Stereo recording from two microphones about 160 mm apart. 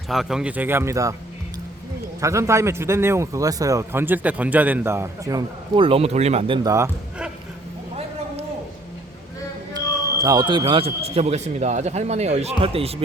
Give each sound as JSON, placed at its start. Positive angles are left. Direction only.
{"t": 0.1, "sound": "a man's voice", "side_deg": 0}
{"t": 2.2, "sound": "a man's voice", "side_deg": -20}
{"t": 5.7, "sound": "speech", "side_deg": -35}
{"t": 6.6, "sound": "speech", "side_deg": -20}
{"t": 9.7, "sound": "speech", "side_deg": -25}